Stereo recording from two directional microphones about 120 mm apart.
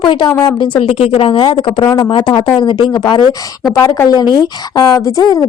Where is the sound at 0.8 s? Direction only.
55° left (ahead or behind); by 3.2 s 40° left (ahead or behind).